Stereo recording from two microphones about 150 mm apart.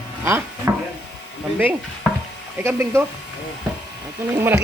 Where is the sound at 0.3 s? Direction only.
15° right (ahead or behind).